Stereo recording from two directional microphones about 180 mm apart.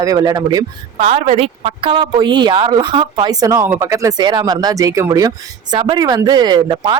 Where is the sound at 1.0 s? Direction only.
35° right (ahead or behind).